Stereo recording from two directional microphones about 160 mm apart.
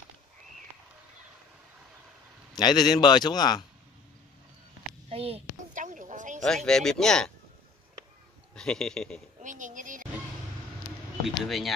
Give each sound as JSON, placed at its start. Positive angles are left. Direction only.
{"t": 2.6, "sound": "a man's voice", "side_deg": 25}
{"t": 5.1, "sound": "a child's voice", "side_deg": -40}
{"t": 5.8, "sound": "a sound", "side_deg": -50}
{"t": 6.4, "sound": "speech", "side_deg": 5}
{"t": 8.5, "sound": "speech", "side_deg": 5}
{"t": 9.4, "sound": "speech", "side_deg": -50}
{"t": 11.2, "sound": "speech", "side_deg": 0}